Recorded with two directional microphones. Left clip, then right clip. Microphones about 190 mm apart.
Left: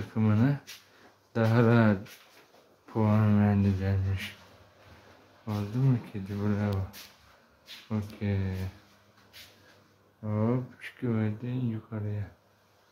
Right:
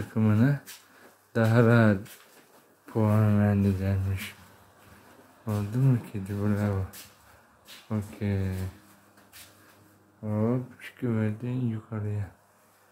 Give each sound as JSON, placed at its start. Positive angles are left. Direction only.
{"t": 0.1, "sound": "speech", "side_deg": -10}
{"t": 5.4, "sound": "speech", "side_deg": -15}
{"t": 7.9, "sound": "speech", "side_deg": -15}
{"t": 10.2, "sound": "speech", "side_deg": 0}